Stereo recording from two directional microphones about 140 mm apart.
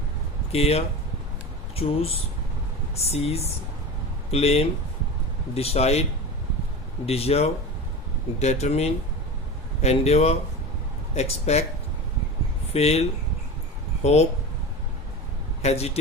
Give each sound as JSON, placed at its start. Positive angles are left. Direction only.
{"t": 0.5, "sound": "speech", "side_deg": 45}
{"t": 12.7, "sound": "speech", "side_deg": 50}
{"t": 15.6, "sound": "speech", "side_deg": 50}